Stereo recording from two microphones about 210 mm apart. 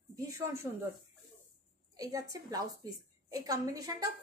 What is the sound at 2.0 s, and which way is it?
A woman's voice, 15° right (ahead or behind).